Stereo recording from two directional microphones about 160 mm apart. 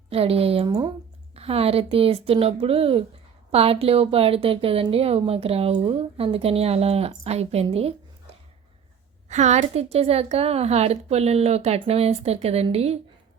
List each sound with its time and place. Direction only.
0.1 s a woman's voice: 40° right (ahead or behind)
9.3 s a woman's voice: 45° right (ahead or behind)